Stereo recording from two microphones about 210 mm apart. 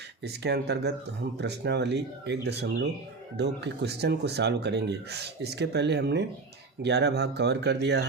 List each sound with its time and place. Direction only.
0.2 s speech: 50° right (ahead or behind)